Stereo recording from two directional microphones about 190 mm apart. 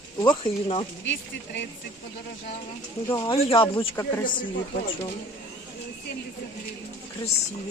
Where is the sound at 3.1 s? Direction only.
25° left (ahead or behind).